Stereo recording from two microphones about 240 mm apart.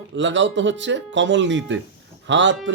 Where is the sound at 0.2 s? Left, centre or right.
Right.